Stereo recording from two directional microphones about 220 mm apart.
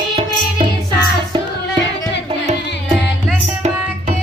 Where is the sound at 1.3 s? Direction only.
20° right (ahead or behind).